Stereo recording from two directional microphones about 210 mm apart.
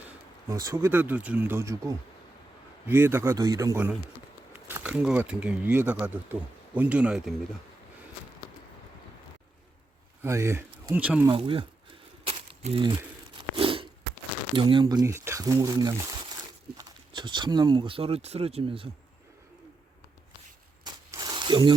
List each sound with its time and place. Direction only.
0.1 s speech: 15° right (ahead or behind)
10.2 s speech: 15° right (ahead or behind)
11.3 s speech: 25° right (ahead or behind)
12.2 s crumpling: 30° right (ahead or behind)
13.3 s crunch: 25° right (ahead or behind)
14.5 s speech: 25° right (ahead or behind)
20.8 s a sound: 20° right (ahead or behind)